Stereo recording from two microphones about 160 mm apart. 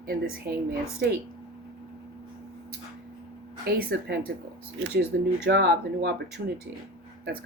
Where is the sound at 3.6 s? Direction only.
75° right (ahead or behind).